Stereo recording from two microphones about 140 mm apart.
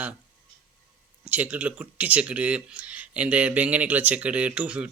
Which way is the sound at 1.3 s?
10° right (ahead or behind).